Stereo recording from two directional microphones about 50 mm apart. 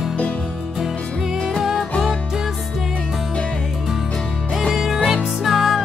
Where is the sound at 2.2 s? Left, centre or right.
Centre.